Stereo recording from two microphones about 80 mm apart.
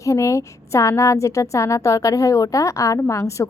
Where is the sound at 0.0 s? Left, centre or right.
Left.